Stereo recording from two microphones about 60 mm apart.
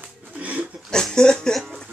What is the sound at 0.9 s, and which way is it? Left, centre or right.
Speech, centre.